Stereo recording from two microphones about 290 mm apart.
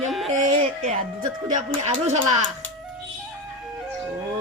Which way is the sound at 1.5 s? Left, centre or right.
Right.